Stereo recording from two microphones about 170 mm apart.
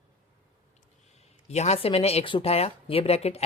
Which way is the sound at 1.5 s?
40° left (ahead or behind).